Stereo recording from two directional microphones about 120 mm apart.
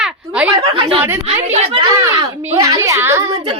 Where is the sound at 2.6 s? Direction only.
30° right (ahead or behind).